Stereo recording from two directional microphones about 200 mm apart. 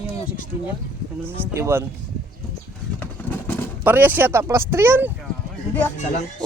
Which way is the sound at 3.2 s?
10° left (ahead or behind).